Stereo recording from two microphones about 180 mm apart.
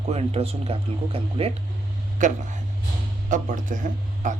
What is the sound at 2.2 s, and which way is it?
Speech, 45° right (ahead or behind).